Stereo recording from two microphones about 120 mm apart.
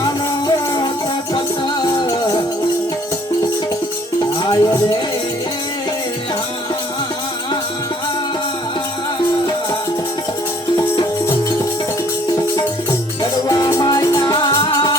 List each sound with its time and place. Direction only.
0.0 s music: 35° left (ahead or behind)
4.4 s music: 30° left (ahead or behind)
13.3 s music: 30° left (ahead or behind)